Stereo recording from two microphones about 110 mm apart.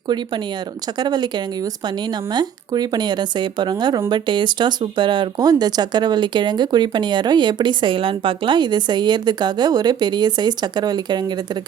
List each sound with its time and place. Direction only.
0.9 s speech: 40° right (ahead or behind)